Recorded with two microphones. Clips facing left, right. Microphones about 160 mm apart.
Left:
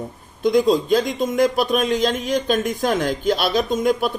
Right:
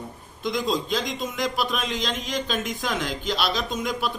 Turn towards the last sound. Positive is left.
turn(degrees=45)  # may be behind; listen again after turning